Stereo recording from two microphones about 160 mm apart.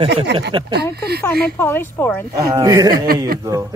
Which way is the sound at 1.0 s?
85° right.